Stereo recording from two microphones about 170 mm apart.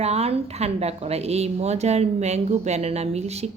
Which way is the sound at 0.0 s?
40° right (ahead or behind).